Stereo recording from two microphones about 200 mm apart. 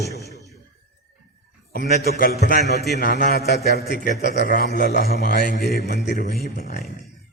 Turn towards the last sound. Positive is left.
turn(degrees=55)  # may be behind; listen again after turning